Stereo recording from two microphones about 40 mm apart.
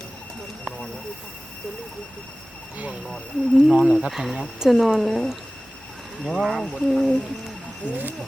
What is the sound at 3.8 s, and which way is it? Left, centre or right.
Speech, right.